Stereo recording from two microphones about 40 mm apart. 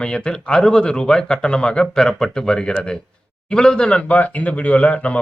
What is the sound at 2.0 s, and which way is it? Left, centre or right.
Speech, centre.